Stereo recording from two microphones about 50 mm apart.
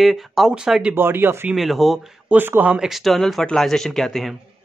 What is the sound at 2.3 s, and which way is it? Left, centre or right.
Speech, right.